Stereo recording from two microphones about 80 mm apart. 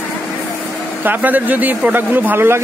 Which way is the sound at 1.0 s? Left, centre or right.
Right.